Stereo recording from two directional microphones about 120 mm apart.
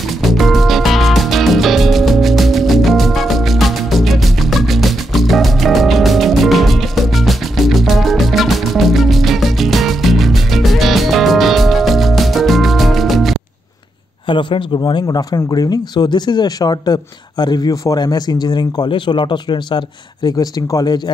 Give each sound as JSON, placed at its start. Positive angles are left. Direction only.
{"t": 0.2, "sound": "music", "side_deg": 0}
{"t": 14.2, "sound": "speech", "side_deg": 45}